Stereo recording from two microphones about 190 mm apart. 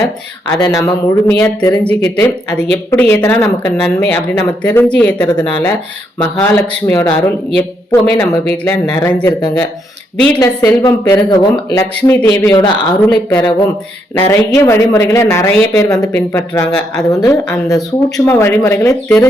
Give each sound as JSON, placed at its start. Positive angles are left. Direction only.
{"t": 0.6, "sound": "speech", "side_deg": 15}
{"t": 1.8, "sound": "speech", "side_deg": 5}
{"t": 2.1, "sound": "speech", "side_deg": 20}
{"t": 7.2, "sound": "a woman's voice", "side_deg": 5}
{"t": 10.4, "sound": "speech", "side_deg": 20}